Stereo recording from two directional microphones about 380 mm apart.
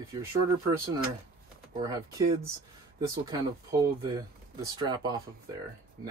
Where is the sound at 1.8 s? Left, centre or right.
Centre.